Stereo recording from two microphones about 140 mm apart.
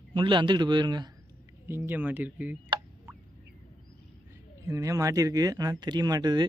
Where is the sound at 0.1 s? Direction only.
35° right (ahead or behind).